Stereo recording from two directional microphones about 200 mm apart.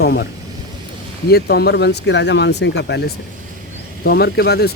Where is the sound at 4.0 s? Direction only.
50° left (ahead or behind).